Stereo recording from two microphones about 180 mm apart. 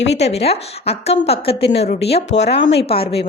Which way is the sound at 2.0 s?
65° left (ahead or behind).